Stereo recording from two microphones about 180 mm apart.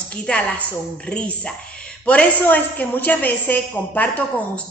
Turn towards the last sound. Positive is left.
turn(degrees=10)  # may be behind; listen again after turning